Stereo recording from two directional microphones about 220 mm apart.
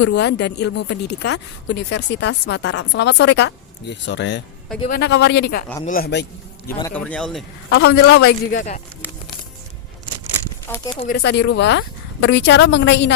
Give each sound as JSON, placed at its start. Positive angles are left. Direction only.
{"t": 0.0, "sound": "speech", "side_deg": 50}
{"t": 6.9, "sound": "speech", "side_deg": 5}
{"t": 7.7, "sound": "speech", "side_deg": 50}
{"t": 10.7, "sound": "speech", "side_deg": 10}
{"t": 11.0, "sound": "speech", "side_deg": 50}